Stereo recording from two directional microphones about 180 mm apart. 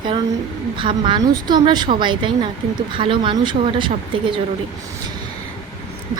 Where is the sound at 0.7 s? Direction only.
25° right (ahead or behind).